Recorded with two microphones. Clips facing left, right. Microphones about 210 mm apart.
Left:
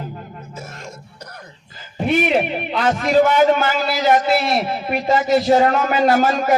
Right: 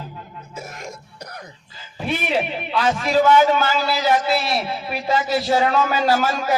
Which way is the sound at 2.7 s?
55° left (ahead or behind).